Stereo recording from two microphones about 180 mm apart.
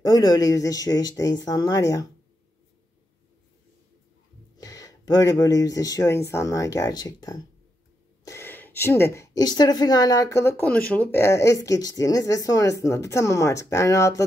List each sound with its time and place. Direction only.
0.0 s speech: 20° left (ahead or behind)
4.6 s a woman's voice: 20° left (ahead or behind)